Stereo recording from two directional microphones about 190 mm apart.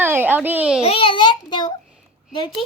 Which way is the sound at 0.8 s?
30° left (ahead or behind).